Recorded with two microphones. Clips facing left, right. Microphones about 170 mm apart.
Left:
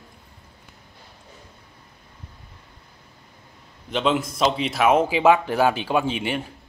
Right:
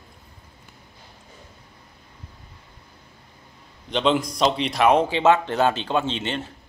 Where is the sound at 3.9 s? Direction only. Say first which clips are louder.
Right 1 dB; 5° left (ahead or behind).